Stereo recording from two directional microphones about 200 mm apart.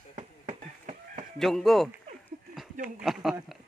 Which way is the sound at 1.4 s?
Centre (ahead or behind).